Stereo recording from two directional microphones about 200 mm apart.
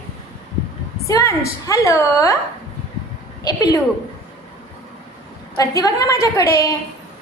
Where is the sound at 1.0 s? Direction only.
15° left (ahead or behind).